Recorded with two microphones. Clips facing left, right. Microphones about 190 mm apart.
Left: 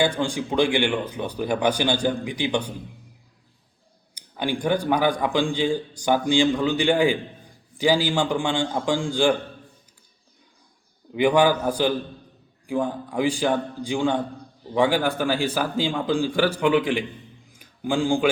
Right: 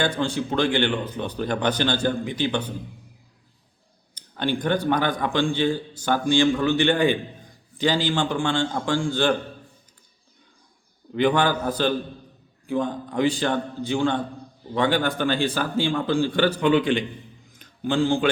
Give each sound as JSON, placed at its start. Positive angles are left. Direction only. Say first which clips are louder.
{"t": 0.0, "sound": "a man's voice", "louder": "left 1 dB", "side_deg": 10}
{"t": 4.1, "sound": "a man's voice", "louder": "right 1 dB", "side_deg": 10}
{"t": 11.1, "sound": "a man's voice", "louder": "left 2 dB", "side_deg": 10}
{"t": 17.5, "sound": "a sound", "louder": "even", "side_deg": 10}